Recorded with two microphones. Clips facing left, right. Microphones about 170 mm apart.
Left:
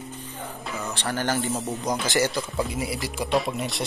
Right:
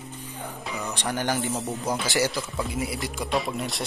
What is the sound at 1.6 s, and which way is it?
Speech, centre (ahead or behind).